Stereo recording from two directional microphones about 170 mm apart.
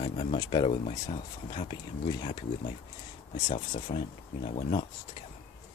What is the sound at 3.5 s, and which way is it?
Speech, 35° left (ahead or behind).